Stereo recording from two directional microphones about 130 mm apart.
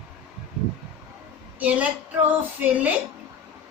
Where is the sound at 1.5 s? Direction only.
10° right (ahead or behind).